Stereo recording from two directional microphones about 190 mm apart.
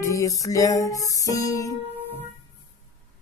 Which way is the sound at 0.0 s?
15° left (ahead or behind).